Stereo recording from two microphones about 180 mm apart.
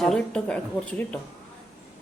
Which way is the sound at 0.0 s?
5° left (ahead or behind).